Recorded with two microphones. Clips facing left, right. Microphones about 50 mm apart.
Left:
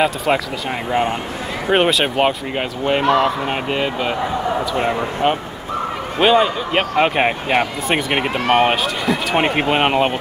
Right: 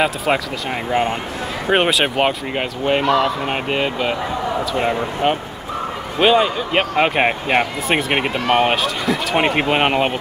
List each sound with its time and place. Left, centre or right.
0.0 s speech: centre
3.0 s speech: left
3.4 s speech: centre
8.3 s speech: left
8.6 s speech: centre